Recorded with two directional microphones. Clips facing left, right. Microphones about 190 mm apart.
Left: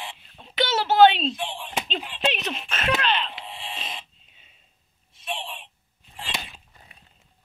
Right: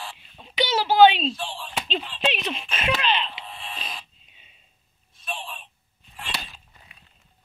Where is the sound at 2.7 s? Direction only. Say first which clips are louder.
Left 2 dB; 10° right (ahead or behind).